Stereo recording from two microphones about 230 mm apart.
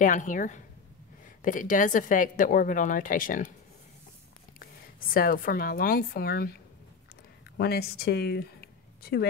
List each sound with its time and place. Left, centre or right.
0.0 s a woman's voice: left
4.6 s a woman's voice: left
7.5 s speech: left